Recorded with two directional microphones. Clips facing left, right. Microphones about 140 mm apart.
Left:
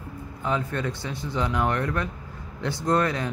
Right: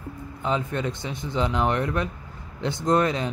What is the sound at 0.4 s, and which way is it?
Speech, 20° right (ahead or behind).